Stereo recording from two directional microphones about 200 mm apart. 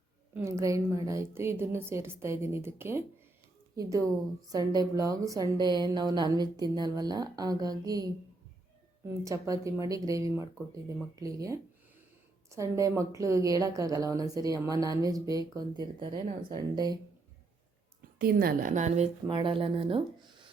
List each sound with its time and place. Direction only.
0.3 s a woman's voice: 15° right (ahead or behind)
9.2 s a woman's voice: 15° right (ahead or behind)
18.2 s a woman's voice: 45° right (ahead or behind)
19.3 s a woman's voice: 25° right (ahead or behind)